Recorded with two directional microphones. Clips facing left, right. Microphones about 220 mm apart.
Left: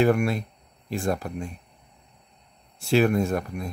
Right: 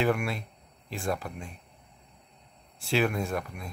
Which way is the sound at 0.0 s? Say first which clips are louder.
Left 6 dB; 45° left (ahead or behind).